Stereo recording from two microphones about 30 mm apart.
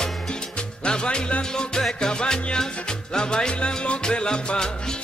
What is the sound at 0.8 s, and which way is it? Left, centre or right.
Music, left.